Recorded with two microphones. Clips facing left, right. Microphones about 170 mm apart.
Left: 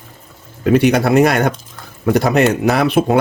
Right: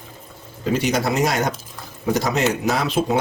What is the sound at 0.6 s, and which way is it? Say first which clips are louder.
Speech: left 8 dB; 60° left (ahead or behind).